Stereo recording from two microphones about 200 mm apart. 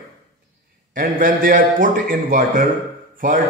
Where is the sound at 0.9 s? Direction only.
45° right (ahead or behind).